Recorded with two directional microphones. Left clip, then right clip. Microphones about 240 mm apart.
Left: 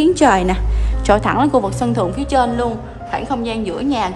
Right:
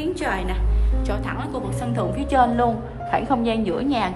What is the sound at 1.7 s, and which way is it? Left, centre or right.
A woman's voice, centre.